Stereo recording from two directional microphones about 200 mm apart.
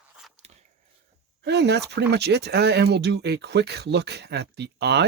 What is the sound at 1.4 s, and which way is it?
Speech, 60° right (ahead or behind).